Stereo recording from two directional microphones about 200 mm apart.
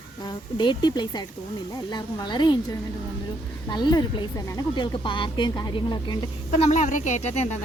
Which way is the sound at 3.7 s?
20° left (ahead or behind).